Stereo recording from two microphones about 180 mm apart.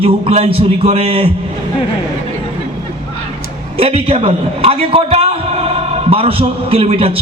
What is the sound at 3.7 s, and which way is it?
A man's voice, 35° right (ahead or behind).